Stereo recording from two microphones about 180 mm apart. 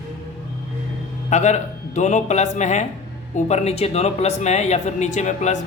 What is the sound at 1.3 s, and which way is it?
Speech, 40° left (ahead or behind).